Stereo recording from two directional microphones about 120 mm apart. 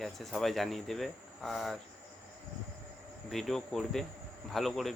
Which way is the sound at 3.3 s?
5° left (ahead or behind).